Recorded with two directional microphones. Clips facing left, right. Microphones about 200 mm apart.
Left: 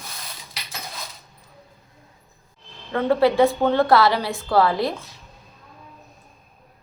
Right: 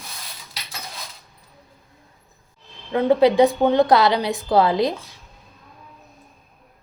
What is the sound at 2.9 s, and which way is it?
A woman's voice, 15° right (ahead or behind).